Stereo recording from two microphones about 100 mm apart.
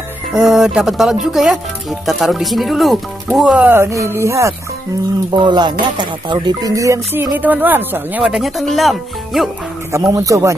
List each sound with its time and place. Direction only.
0.3 s speech: 5° right (ahead or behind)
3.5 s speech: 20° right (ahead or behind)
5.3 s speech: 45° right (ahead or behind)
6.7 s a man's voice: 35° right (ahead or behind)
7.3 s speech: 20° right (ahead or behind)
8.2 s speech: 5° right (ahead or behind)
9.9 s a man's voice: 35° right (ahead or behind)